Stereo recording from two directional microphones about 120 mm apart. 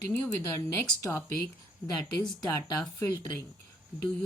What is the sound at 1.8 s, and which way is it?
Speech, 30° left (ahead or behind).